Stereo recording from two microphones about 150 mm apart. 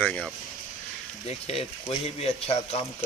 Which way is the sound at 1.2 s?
40° left (ahead or behind).